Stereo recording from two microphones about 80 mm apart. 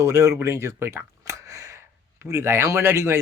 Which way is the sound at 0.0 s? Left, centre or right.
Right.